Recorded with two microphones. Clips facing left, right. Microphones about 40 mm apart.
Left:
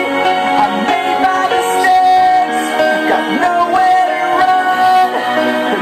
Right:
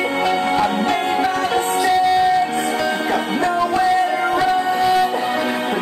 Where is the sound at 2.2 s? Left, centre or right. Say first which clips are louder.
Left 6 dB; left.